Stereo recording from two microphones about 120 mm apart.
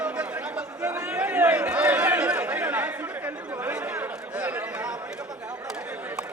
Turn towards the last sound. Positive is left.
turn(degrees=-10)  # may be behind; listen again after turning